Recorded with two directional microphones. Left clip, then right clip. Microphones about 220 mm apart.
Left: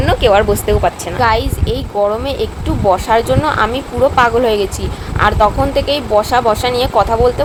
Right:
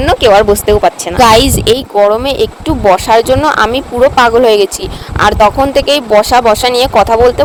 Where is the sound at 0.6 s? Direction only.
40° right (ahead or behind).